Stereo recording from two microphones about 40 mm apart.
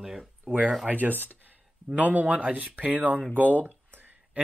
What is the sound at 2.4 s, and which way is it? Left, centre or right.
Speech, right.